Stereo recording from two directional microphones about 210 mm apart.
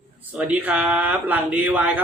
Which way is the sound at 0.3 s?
5° right (ahead or behind).